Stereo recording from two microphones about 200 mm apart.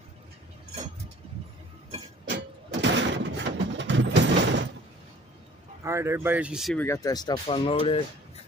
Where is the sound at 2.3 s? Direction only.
60° right (ahead or behind).